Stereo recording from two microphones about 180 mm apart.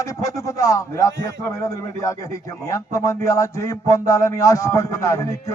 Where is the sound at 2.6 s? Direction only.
15° left (ahead or behind).